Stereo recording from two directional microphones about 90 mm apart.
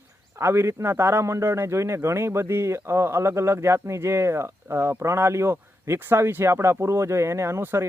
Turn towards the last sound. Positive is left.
turn(degrees=-30)  # may be behind; listen again after turning